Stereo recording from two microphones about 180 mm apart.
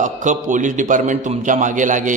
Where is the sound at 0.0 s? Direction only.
45° right (ahead or behind).